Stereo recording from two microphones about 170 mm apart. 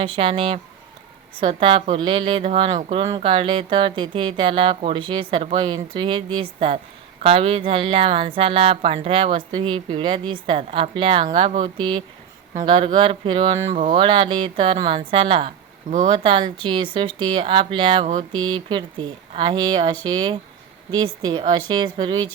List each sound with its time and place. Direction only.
0.0 s speech: 30° right (ahead or behind)